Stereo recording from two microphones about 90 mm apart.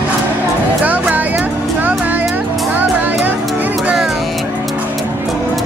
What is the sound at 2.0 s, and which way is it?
Music, 20° right (ahead or behind).